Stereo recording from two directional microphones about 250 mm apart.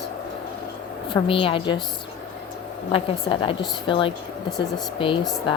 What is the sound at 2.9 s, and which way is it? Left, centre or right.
A woman's voice, left.